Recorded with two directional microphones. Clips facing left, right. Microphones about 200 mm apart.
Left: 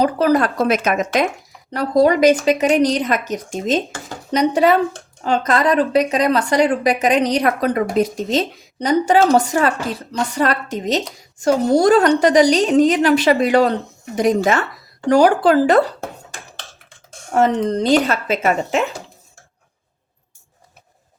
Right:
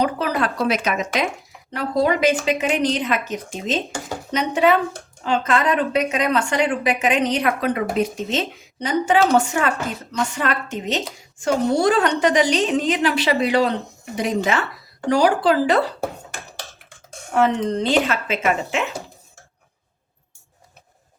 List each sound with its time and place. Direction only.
0.0 s speech: 40° left (ahead or behind)
17.3 s speech: 40° left (ahead or behind)